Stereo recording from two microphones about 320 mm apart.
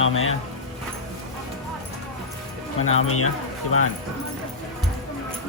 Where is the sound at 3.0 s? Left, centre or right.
Left.